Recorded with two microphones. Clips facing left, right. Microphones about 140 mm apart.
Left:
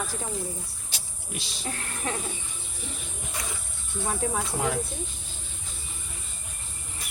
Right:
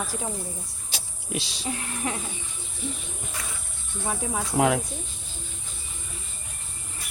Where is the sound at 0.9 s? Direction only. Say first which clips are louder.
Right 7 dB; 90° right.